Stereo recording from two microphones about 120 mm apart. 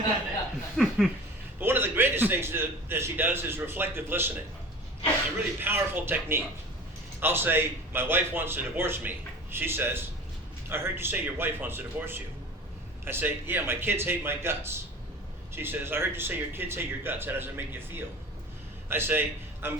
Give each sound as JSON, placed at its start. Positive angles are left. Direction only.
{"t": 0.8, "sound": "laughter", "side_deg": 0}
{"t": 1.5, "sound": "a man's voice", "side_deg": -20}
{"t": 5.5, "sound": "a man's voice", "side_deg": -20}